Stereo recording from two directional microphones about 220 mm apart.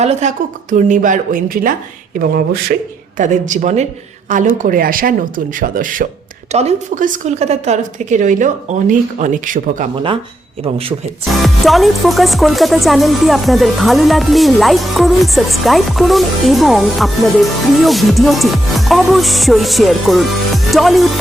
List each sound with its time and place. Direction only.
0.0 s a woman's voice: 30° right (ahead or behind)
11.3 s speech: centre (ahead or behind)